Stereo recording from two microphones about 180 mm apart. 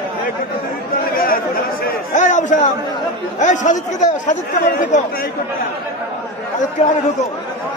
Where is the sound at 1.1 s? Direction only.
55° left (ahead or behind).